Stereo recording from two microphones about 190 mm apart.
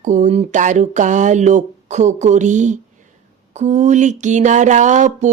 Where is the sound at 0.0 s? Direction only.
40° right (ahead or behind).